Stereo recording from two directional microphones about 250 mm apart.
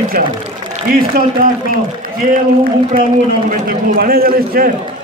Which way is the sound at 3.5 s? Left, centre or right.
Right.